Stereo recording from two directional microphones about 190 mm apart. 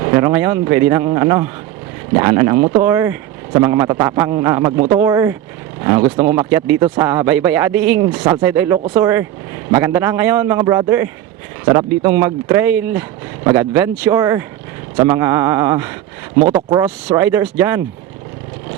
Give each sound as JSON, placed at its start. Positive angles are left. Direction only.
{"t": 0.1, "sound": "a man's voice", "side_deg": -15}
{"t": 2.8, "sound": "a man's voice", "side_deg": -10}